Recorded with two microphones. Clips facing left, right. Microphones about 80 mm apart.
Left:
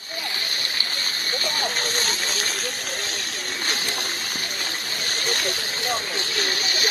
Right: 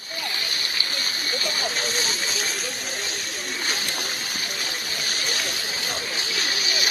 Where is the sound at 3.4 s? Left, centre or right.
Left.